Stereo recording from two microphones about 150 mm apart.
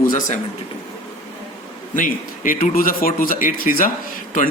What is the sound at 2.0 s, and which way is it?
Speech, 60° left (ahead or behind).